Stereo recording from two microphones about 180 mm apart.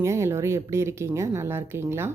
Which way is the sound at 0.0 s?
15° right (ahead or behind).